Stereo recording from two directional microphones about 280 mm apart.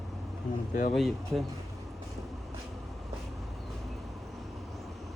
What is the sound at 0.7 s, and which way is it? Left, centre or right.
Speech, left.